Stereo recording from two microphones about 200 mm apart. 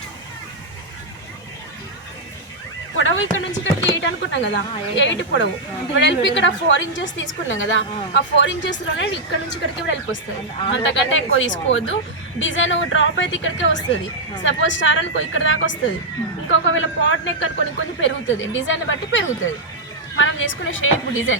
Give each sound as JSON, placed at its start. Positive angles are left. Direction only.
{"t": 3.0, "sound": "a woman's voice", "side_deg": 70}
{"t": 10.8, "sound": "a woman's voice", "side_deg": 75}